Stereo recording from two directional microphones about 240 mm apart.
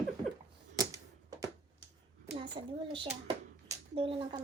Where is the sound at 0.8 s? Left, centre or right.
Centre.